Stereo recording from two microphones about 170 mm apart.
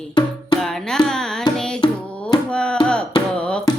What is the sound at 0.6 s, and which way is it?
Carnatic music, 5° left (ahead or behind).